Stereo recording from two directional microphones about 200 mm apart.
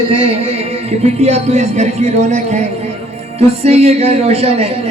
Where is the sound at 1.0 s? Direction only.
30° right (ahead or behind).